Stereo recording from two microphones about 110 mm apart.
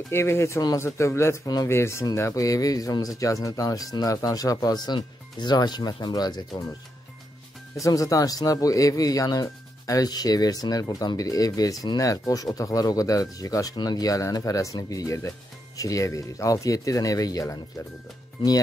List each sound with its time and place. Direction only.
0.1 s speech: 25° left (ahead or behind); by 6.6 s 40° left (ahead or behind)
7.7 s speech: 30° left (ahead or behind)